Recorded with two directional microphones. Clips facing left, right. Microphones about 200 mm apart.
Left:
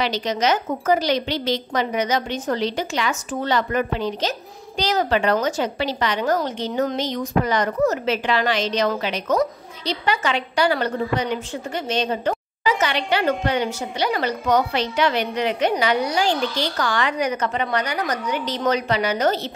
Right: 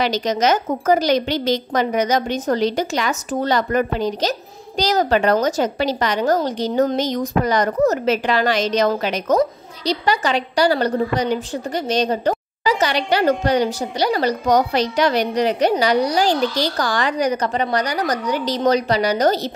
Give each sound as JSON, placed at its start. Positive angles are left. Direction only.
{"t": 0.0, "sound": "a woman's voice", "side_deg": -45}